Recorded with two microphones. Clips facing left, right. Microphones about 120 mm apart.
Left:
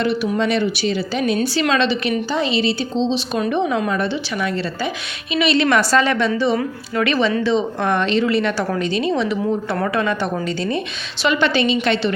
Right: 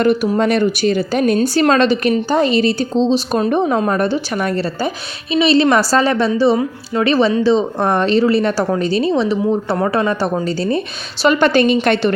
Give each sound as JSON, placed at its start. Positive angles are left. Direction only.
{"t": 0.0, "sound": "a woman's voice", "side_deg": -45}
{"t": 5.3, "sound": "a woman's voice", "side_deg": -35}